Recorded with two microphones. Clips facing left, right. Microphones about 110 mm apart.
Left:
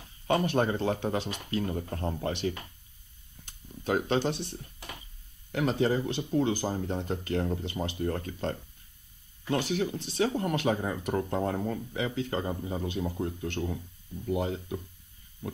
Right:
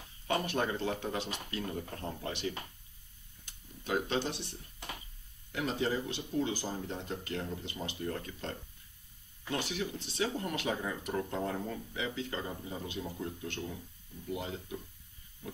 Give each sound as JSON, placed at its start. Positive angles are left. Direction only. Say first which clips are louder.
{"t": 0.3, "sound": "speech", "louder": "left 6 dB", "side_deg": 40}
{"t": 3.4, "sound": "speech", "louder": "left 7 dB", "side_deg": 45}